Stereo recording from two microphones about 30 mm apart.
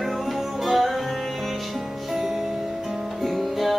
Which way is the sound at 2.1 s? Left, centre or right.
Centre.